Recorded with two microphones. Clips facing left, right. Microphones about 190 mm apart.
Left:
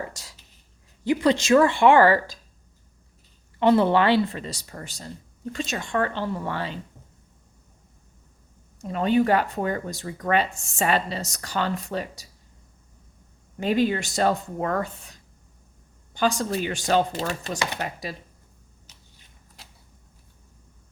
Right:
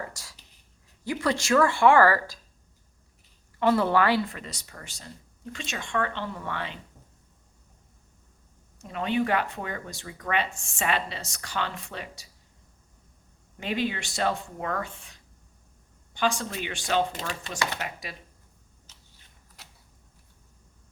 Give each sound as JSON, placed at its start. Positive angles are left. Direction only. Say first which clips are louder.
{"t": 0.0, "sound": "writing", "louder": "left 3 dB", "side_deg": 20}
{"t": 1.0, "sound": "speech", "louder": "left 7 dB", "side_deg": 20}
{"t": 3.6, "sound": "speech", "louder": "left 4 dB", "side_deg": 20}
{"t": 8.8, "sound": "speech", "louder": "left 6 dB", "side_deg": 40}
{"t": 13.6, "sound": "speech", "louder": "left 7 dB", "side_deg": 40}
{"t": 18.9, "sound": "a sound", "louder": "left 2 dB", "side_deg": 15}